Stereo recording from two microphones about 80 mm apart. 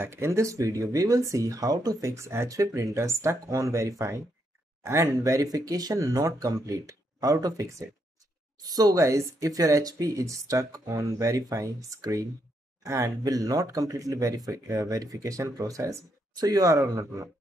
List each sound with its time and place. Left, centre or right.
0.0 s speech: right
8.5 s speech: right
9.0 s speech: right